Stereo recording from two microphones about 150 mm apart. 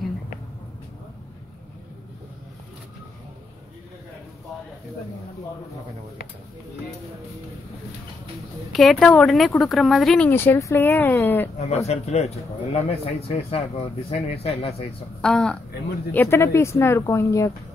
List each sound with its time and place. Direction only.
8.7 s speech: centre (ahead or behind)
11.5 s speech: 45° left (ahead or behind)
15.2 s a woman's voice: 5° left (ahead or behind); by 17.5 s 20° left (ahead or behind)